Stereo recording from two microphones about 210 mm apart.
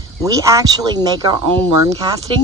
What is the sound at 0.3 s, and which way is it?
Speech, 15° right (ahead or behind).